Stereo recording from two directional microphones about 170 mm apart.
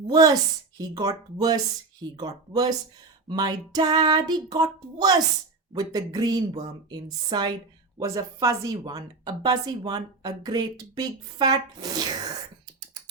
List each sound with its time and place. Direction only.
0.1 s a woman's voice: 20° right (ahead or behind)
3.2 s a woman's voice: 25° right (ahead or behind)